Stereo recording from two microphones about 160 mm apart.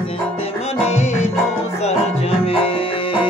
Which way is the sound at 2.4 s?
35° left (ahead or behind).